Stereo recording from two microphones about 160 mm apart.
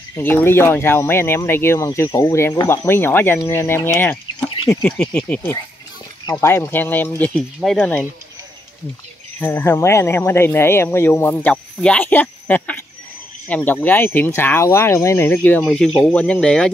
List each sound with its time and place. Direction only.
0.1 s speech: 15° left (ahead or behind)
9.4 s speech: 15° left (ahead or behind)